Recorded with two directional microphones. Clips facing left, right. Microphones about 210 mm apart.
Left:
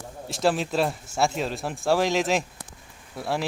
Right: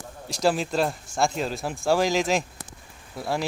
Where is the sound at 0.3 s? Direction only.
Centre (ahead or behind).